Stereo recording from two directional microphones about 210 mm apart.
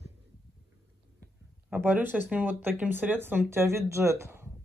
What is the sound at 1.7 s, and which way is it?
Speech, 10° right (ahead or behind).